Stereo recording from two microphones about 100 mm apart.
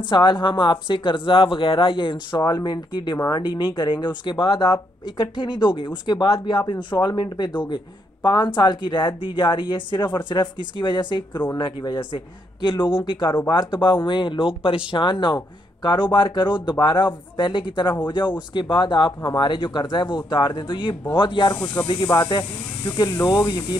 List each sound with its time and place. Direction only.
0.1 s speech: 50° left (ahead or behind)